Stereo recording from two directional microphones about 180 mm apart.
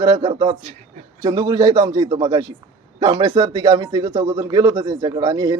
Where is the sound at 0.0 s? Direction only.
20° right (ahead or behind).